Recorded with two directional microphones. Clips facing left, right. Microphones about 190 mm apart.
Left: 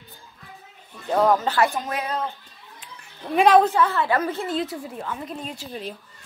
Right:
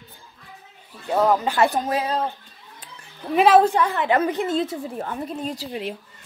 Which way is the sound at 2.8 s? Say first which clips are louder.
Even; 35° right (ahead or behind).